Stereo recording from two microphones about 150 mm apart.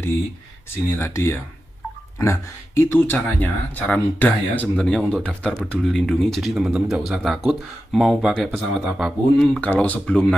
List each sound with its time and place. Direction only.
0.9 s speech: 15° left (ahead or behind); by 9.1 s 5° right (ahead or behind)
9.4 s speech: 10° left (ahead or behind)